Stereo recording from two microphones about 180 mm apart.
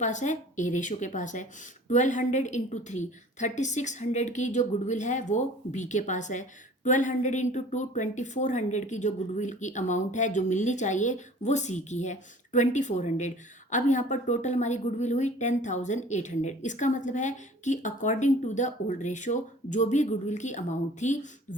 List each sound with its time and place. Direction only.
0.0 s a woman's voice: 40° left (ahead or behind)